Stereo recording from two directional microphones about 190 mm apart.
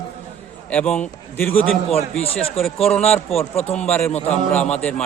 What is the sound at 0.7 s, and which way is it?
A man's voice, 5° left (ahead or behind).